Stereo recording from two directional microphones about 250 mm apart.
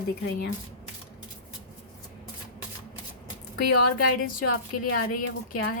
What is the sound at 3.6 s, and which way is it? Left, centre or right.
Speech, left.